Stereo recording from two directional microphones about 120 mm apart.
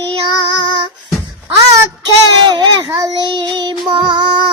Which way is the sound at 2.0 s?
40° right (ahead or behind).